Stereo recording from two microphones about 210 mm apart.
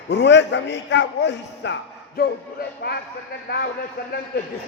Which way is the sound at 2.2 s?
50° left (ahead or behind).